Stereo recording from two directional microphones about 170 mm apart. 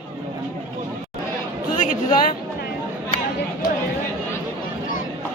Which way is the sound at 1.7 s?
50° left (ahead or behind).